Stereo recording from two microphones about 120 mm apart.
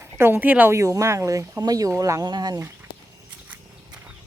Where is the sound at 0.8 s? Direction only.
25° right (ahead or behind).